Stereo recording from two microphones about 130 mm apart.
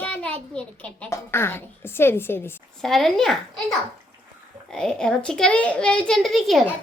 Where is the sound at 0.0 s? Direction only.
10° left (ahead or behind).